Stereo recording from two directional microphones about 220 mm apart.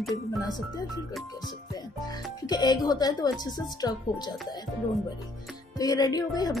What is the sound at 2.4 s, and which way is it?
Speech, 20° left (ahead or behind).